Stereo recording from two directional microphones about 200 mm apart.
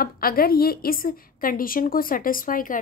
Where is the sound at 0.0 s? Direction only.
45° left (ahead or behind).